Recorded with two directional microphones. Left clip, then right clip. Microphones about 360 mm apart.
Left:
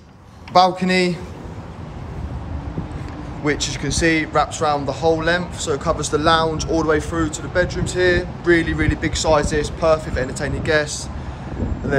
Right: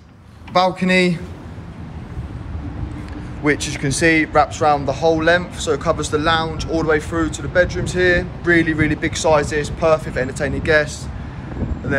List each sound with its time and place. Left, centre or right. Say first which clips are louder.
0.5 s speech: left 1 dB; centre
3.4 s speech: right 3 dB; centre